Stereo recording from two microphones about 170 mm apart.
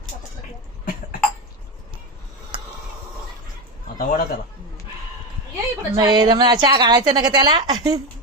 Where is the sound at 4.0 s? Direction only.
55° left (ahead or behind).